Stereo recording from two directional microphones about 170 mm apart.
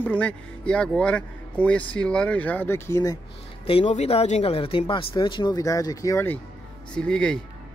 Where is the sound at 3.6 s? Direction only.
40° left (ahead or behind); by 6.4 s 15° left (ahead or behind).